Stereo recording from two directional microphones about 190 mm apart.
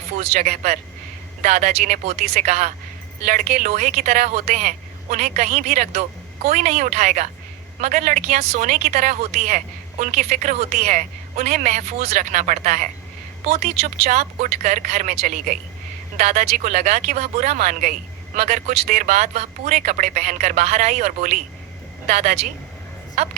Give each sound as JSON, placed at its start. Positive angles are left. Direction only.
{"t": 0.2, "sound": "a woman's voice", "side_deg": -35}